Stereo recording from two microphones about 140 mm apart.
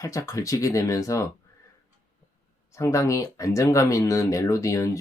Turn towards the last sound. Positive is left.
turn(degrees=20)  # may be behind; listen again after turning